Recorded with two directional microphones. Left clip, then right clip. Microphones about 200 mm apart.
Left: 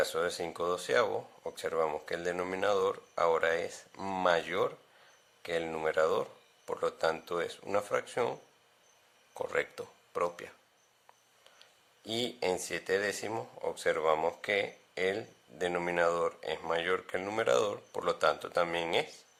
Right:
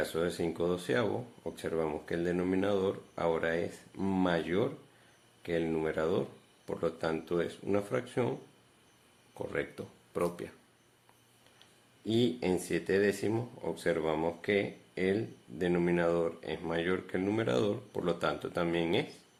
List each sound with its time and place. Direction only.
0.0 s speech: 35° left (ahead or behind)
11.6 s speech: 35° left (ahead or behind)